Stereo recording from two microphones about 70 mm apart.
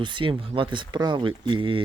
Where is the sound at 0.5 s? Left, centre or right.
Right.